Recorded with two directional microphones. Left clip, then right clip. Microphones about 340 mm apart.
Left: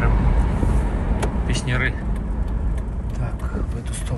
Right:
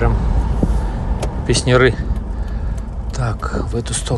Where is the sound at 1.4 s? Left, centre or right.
Centre.